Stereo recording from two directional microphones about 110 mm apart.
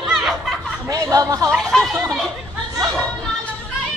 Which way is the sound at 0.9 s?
30° right (ahead or behind).